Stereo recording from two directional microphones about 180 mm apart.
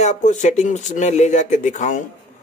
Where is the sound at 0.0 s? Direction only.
40° left (ahead or behind).